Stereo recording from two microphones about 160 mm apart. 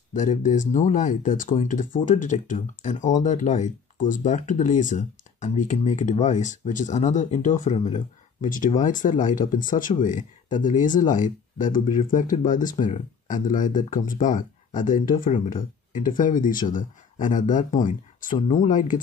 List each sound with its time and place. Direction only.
0.1 s speech: 50° left (ahead or behind)